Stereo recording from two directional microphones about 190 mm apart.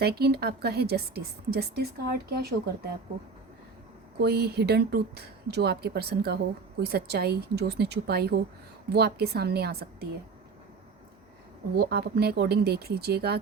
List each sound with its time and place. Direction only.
0.0 s a woman's voice: 55° right (ahead or behind)
4.2 s a woman's voice: 60° right (ahead or behind)
11.8 s a woman's voice: 55° right (ahead or behind)